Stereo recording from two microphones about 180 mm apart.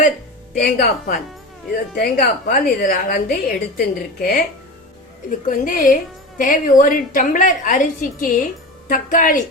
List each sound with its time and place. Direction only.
0.6 s a woman's voice: 55° left (ahead or behind)
5.5 s a woman's voice: 50° left (ahead or behind)